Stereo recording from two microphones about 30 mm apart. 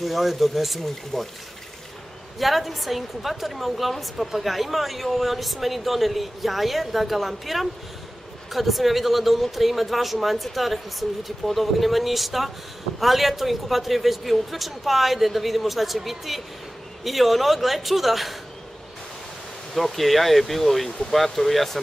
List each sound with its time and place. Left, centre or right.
0.0 s speech: centre
2.3 s speech: centre
19.7 s speech: centre